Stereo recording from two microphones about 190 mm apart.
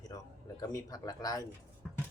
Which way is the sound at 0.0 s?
20° left (ahead or behind).